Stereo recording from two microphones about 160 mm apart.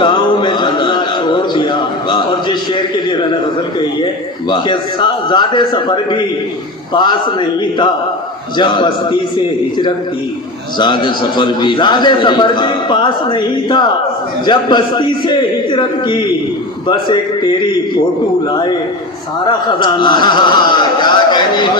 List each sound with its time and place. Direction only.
0.0 s a sound: 30° left (ahead or behind)
3.8 s a man's voice: 30° left (ahead or behind)
8.5 s a man's voice: 30° left (ahead or behind)
10.8 s a man's voice: 30° left (ahead or behind)
19.5 s a man's voice: 30° left (ahead or behind)